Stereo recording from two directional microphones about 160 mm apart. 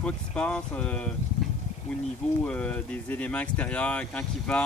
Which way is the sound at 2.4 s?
5° left (ahead or behind).